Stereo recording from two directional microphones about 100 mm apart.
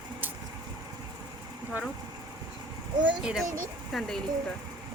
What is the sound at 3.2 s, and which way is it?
A child's voice, 5° right (ahead or behind).